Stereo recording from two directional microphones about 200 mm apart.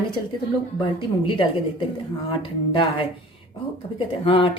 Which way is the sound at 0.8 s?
25° left (ahead or behind).